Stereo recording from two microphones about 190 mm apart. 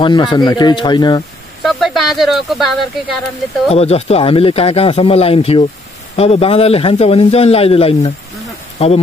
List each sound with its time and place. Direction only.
0.0 s speech: 25° left (ahead or behind)
1.6 s speech: centre (ahead or behind)
3.7 s a man's voice: 30° left (ahead or behind)